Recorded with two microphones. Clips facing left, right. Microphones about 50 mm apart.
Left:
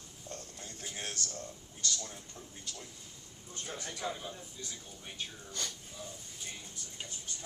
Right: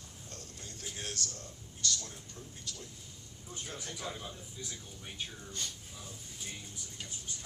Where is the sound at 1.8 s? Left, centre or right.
Centre.